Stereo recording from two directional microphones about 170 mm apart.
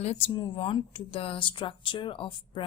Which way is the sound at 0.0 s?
40° left (ahead or behind).